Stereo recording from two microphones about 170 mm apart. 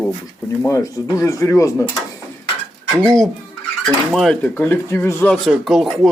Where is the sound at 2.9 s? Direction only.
5° left (ahead or behind).